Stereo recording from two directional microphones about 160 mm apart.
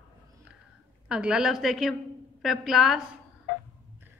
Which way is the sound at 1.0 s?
5° right (ahead or behind).